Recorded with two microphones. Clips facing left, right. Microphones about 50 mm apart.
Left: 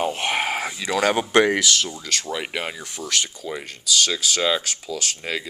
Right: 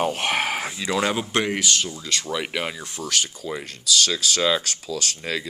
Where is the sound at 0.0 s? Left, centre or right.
Centre.